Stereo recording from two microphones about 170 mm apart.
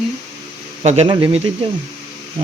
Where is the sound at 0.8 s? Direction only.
35° right (ahead or behind).